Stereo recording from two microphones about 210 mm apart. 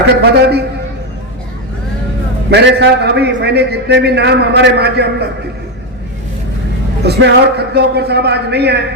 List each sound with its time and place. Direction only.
0.3 s a man's voice: 50° right (ahead or behind)
2.5 s a man's voice: 50° right (ahead or behind)
7.0 s a man's voice: 50° right (ahead or behind)